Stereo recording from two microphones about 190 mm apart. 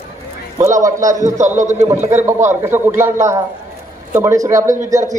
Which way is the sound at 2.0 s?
40° right (ahead or behind).